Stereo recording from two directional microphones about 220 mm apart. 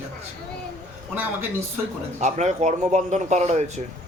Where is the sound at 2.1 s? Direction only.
30° right (ahead or behind).